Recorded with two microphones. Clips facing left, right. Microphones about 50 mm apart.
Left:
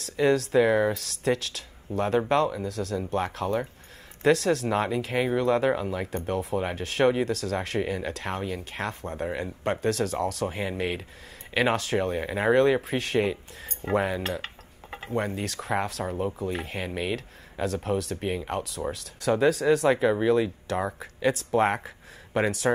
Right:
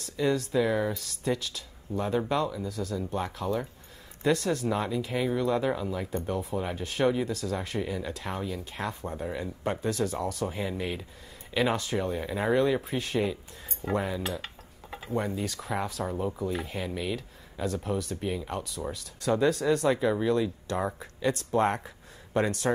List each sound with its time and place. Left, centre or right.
0.0 s speech: left
10.4 s speech: left
21.5 s speech: left